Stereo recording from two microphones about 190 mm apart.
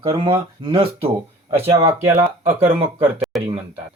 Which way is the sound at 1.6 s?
15° right (ahead or behind).